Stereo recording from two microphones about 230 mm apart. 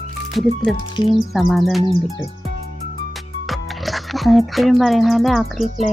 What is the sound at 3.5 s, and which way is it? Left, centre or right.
Speech, centre.